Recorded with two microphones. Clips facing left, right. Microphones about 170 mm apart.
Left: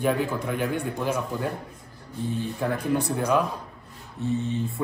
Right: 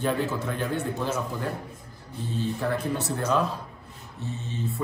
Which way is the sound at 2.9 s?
15° left (ahead or behind).